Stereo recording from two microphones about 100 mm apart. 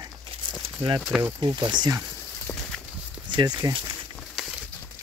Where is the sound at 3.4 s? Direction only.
50° right (ahead or behind).